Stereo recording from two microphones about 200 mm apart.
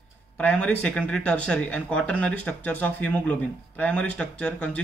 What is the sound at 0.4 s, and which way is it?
Speech, 5° left (ahead or behind).